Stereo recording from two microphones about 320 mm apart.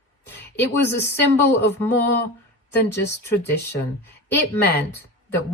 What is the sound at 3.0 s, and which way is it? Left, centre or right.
A woman's voice, centre.